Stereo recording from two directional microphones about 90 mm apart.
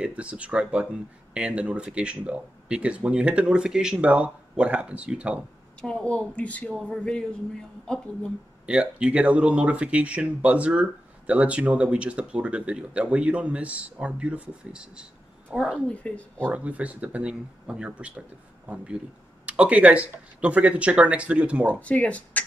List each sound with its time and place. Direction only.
0.0 s speech: 15° right (ahead or behind)
5.8 s speech: 10° left (ahead or behind)
8.6 s speech: 10° right (ahead or behind)
15.9 s speech: 15° left (ahead or behind)
16.5 s speech: 15° right (ahead or behind)
19.4 s speech: 15° right (ahead or behind)
21.6 s speech: 15° left (ahead or behind)